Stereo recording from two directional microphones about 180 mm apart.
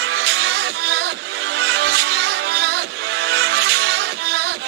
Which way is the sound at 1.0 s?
75° right (ahead or behind).